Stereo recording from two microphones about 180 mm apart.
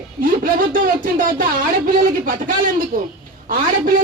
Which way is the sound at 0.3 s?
50° right (ahead or behind).